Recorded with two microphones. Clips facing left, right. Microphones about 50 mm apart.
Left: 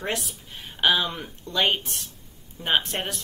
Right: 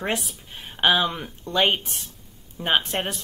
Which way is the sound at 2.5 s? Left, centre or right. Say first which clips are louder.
Right 2 dB; centre.